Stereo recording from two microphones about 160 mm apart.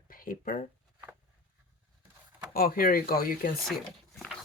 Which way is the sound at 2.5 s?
65° left (ahead or behind).